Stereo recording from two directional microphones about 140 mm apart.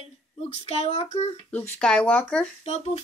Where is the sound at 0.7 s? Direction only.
45° left (ahead or behind).